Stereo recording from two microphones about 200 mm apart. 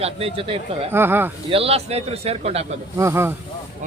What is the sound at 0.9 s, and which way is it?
Speech, 10° right (ahead or behind).